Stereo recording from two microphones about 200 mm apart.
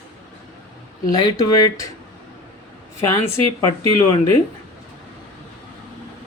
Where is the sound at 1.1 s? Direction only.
20° left (ahead or behind).